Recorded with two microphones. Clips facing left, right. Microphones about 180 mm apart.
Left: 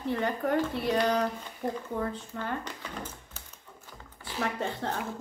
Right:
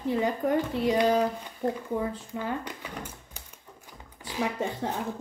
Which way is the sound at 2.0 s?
10° right (ahead or behind).